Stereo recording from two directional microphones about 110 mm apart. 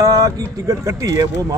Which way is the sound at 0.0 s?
35° right (ahead or behind).